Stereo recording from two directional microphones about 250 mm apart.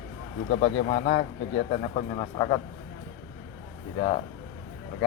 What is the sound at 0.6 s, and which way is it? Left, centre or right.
A man's voice, left.